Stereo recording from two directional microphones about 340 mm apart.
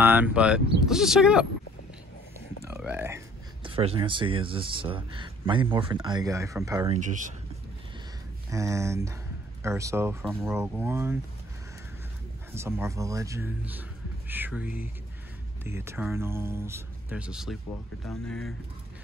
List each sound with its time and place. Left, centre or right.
0.0 s a man's voice: centre
2.7 s a sound: centre
3.6 s speech: centre
7.0 s speech: right
8.5 s speech: centre
12.5 s a man's voice: centre